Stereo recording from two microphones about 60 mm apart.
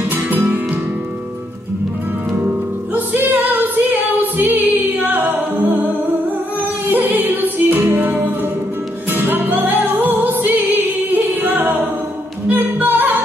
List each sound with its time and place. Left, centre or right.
0.1 s music: right
2.3 s music: right
6.9 s music: right